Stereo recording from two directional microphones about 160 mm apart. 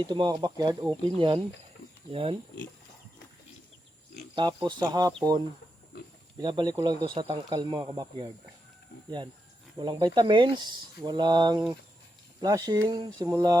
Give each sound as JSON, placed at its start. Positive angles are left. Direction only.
{"t": 0.0, "sound": "speech", "side_deg": -30}
{"t": 4.4, "sound": "speech", "side_deg": -25}
{"t": 9.0, "sound": "speech", "side_deg": -30}